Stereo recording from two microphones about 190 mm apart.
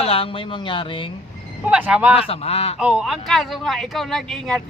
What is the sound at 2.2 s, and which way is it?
Speech, 30° left (ahead or behind).